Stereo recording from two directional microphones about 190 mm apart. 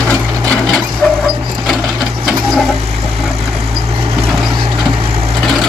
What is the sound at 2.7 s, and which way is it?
Vehicle, 35° right (ahead or behind).